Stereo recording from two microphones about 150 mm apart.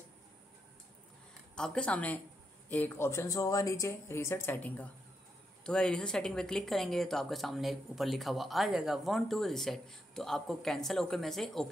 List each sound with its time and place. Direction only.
1.5 s speech: 5° left (ahead or behind)